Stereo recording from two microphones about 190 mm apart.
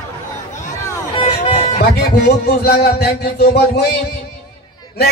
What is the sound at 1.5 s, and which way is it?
Music, 40° left (ahead or behind).